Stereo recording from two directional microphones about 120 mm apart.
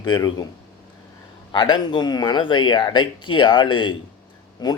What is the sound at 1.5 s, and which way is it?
A man's voice, 40° left (ahead or behind).